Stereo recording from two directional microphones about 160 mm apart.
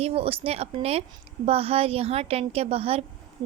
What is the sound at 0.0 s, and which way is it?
A woman's voice, 40° right (ahead or behind).